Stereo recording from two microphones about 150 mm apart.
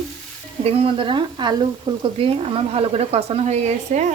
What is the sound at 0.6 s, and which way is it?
Speech, 40° right (ahead or behind).